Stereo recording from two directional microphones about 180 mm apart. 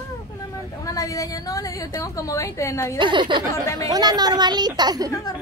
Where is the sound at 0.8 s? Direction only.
20° left (ahead or behind).